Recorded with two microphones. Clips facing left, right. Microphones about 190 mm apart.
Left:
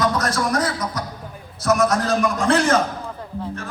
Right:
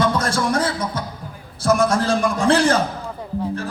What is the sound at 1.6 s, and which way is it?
Music, 30° right (ahead or behind).